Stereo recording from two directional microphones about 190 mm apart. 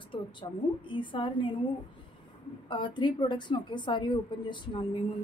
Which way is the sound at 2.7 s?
25° left (ahead or behind).